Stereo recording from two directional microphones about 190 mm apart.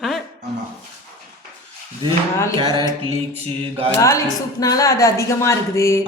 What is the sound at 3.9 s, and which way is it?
A woman's voice, 15° left (ahead or behind).